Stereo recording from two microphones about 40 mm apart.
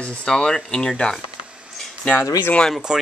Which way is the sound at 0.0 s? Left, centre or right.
Left.